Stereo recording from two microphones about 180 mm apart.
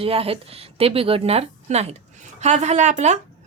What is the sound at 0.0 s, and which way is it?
A woman's voice, 30° right (ahead or behind).